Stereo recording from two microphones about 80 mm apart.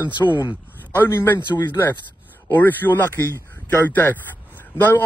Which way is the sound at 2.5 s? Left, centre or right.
Left.